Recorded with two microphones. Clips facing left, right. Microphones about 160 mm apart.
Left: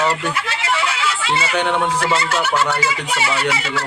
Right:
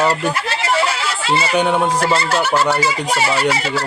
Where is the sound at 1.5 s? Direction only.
10° right (ahead or behind).